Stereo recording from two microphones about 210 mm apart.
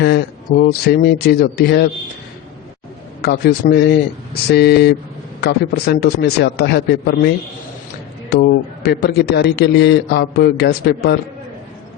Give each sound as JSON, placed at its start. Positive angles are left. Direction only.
{"t": 0.6, "sound": "a man's voice", "side_deg": 45}
{"t": 3.2, "sound": "a man's voice", "side_deg": 50}